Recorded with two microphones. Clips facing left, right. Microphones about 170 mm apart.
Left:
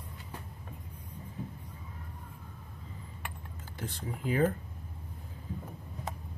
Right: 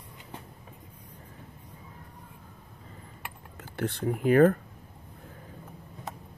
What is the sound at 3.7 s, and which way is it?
Speech, 65° right (ahead or behind).